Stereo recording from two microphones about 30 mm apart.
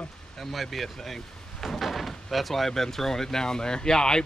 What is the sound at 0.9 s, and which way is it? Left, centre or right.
Door, centre.